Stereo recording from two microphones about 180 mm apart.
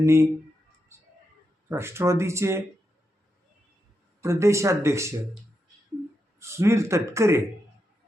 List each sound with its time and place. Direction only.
0.0 s speech: 15° right (ahead or behind)
1.7 s speech: 15° right (ahead or behind)
4.2 s speech: 15° right (ahead or behind)
6.4 s speech: 15° right (ahead or behind)